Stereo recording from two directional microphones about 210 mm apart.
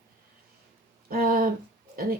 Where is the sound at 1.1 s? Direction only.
45° right (ahead or behind).